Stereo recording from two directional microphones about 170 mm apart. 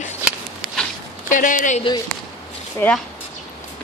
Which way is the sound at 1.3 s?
50° left (ahead or behind).